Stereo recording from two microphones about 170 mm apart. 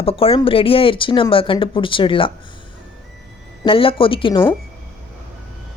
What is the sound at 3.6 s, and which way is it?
Speech, 30° left (ahead or behind).